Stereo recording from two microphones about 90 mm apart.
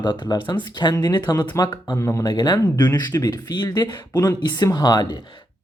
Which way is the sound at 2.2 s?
50° left (ahead or behind).